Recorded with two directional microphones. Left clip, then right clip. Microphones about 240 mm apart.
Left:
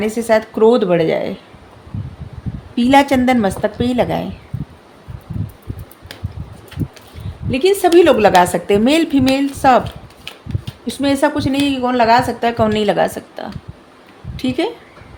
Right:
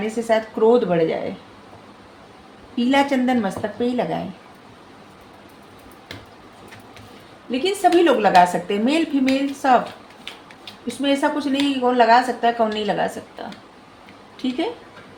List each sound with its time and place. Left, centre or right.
0.0 s a woman's voice: left
2.7 s a woman's voice: left
8.0 s a woman's voice: left
10.8 s a woman's voice: left